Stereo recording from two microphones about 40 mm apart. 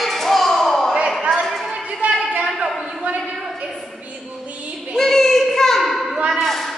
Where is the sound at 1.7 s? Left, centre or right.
Right.